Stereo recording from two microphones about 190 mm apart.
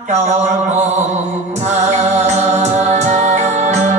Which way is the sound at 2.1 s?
35° right (ahead or behind).